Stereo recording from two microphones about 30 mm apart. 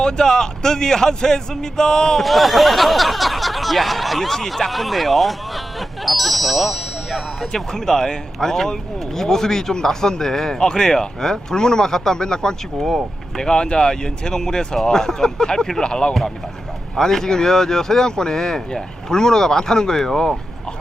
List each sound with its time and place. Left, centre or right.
0.0 s speech: left
2.2 s speech: centre
6.1 s ding: centre
7.5 s speech: centre
12.8 s speech: centre
13.4 s speech: left
15.8 s speech: left
17.0 s speech: centre